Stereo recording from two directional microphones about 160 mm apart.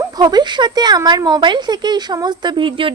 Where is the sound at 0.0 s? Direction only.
25° right (ahead or behind).